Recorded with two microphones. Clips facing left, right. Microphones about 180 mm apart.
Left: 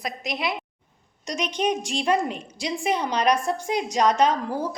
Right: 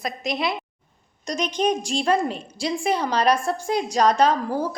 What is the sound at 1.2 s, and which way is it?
Speech, 35° right (ahead or behind).